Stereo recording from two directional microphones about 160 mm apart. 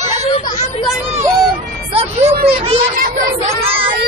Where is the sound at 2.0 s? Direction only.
40° right (ahead or behind).